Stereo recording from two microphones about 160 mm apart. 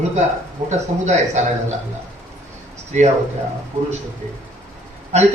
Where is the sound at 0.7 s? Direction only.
45° right (ahead or behind).